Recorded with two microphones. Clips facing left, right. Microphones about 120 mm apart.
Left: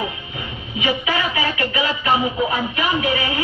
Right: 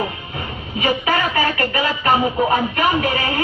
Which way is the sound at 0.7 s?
45° right (ahead or behind).